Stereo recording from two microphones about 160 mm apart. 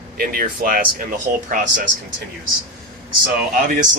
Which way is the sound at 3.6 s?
55° right (ahead or behind).